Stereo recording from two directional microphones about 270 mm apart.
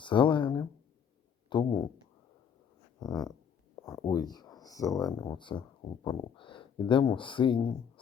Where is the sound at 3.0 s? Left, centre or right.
Centre.